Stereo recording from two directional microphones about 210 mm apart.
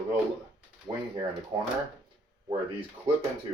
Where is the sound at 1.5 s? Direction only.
20° right (ahead or behind).